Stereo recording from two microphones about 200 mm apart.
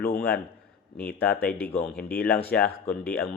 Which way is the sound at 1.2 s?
10° left (ahead or behind).